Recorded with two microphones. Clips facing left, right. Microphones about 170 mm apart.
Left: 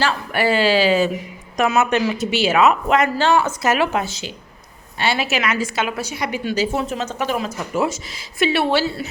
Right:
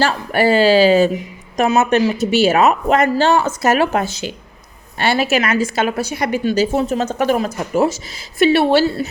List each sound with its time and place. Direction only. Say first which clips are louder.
0.0 s speech: right 4 dB; 40° right (ahead or behind)